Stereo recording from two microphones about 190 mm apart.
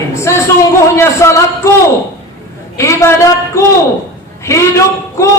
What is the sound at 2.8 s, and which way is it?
Speech, 15° left (ahead or behind).